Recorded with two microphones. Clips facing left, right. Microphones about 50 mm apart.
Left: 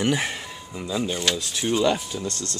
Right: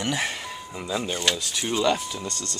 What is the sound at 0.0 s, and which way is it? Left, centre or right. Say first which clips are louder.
Speech: left 3 dB; centre.